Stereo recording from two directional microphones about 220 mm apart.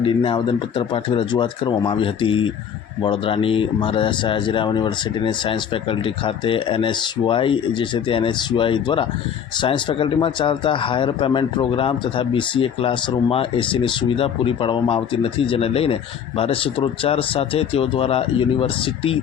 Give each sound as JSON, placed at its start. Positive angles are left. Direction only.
{"t": 0.0, "sound": "speech", "side_deg": 25}